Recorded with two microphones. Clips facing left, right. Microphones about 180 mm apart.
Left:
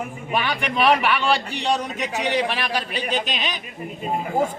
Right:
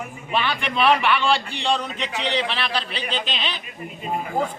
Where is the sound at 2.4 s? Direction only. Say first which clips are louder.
Left 1 dB; 10° left (ahead or behind).